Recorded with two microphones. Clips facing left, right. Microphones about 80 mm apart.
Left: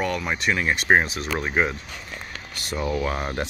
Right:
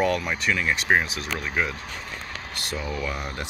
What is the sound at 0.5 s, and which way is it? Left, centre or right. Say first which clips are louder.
Speech: left 3 dB; left.